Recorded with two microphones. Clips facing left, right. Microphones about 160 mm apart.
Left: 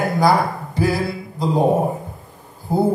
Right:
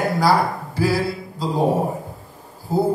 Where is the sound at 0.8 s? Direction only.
20° left (ahead or behind).